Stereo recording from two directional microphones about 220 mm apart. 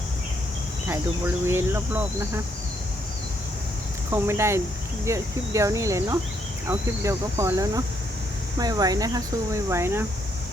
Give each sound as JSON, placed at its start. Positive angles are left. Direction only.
{"t": 1.5, "sound": "speech", "side_deg": -10}
{"t": 4.1, "sound": "speech", "side_deg": -10}